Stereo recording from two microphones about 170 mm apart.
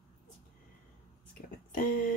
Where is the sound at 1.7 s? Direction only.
55° left (ahead or behind).